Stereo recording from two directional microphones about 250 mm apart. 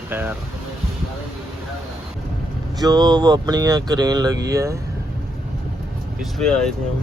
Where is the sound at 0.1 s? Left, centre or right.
Centre.